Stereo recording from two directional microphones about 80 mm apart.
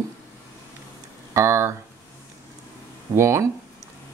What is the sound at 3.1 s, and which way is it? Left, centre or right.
Speech, right.